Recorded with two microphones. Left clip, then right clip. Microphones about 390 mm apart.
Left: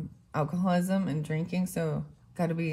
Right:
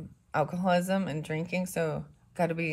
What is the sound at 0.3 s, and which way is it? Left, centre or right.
Speech, right.